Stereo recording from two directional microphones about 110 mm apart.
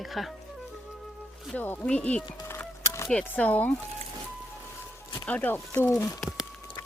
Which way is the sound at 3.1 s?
10° left (ahead or behind).